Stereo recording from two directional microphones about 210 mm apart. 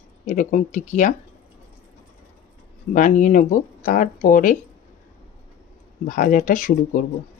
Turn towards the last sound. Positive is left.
turn(degrees=40)  # may be behind; listen again after turning